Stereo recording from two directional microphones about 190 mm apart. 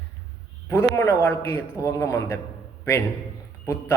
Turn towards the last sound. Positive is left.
turn(degrees=15)  # may be behind; listen again after turning